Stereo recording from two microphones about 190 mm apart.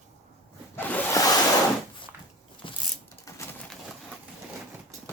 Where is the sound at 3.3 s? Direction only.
15° left (ahead or behind).